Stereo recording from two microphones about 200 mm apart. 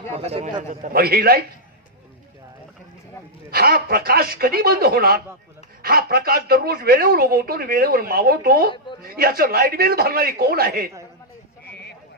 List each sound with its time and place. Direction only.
0.1 s a man's voice: 30° right (ahead or behind); by 1.4 s 50° right (ahead or behind)
3.5 s speech: 50° right (ahead or behind)